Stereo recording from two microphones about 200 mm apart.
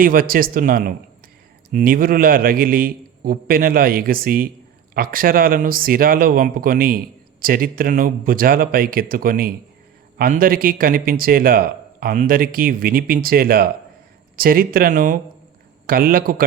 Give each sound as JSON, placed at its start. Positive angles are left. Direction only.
{"t": 0.0, "sound": "speech", "side_deg": -45}